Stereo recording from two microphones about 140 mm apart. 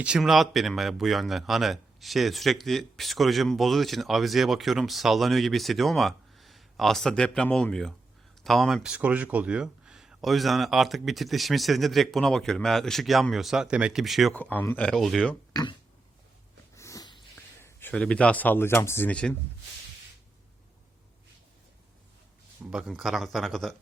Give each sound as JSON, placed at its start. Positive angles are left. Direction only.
{"t": 0.0, "sound": "speech", "side_deg": -5}
{"t": 14.3, "sound": "speech", "side_deg": 10}
{"t": 16.7, "sound": "a sound", "side_deg": 20}
{"t": 17.6, "sound": "speech", "side_deg": 15}
{"t": 22.7, "sound": "speech", "side_deg": -5}